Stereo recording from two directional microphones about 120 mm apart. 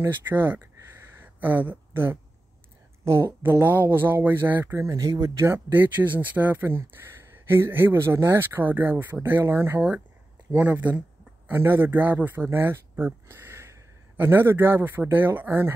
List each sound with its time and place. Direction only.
0.0 s speech: 15° right (ahead or behind)
1.2 s a sound: 15° right (ahead or behind)
3.1 s speech: 20° right (ahead or behind)
5.7 s speech: 15° right (ahead or behind)